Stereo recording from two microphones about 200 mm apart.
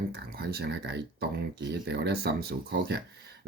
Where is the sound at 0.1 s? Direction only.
55° right (ahead or behind).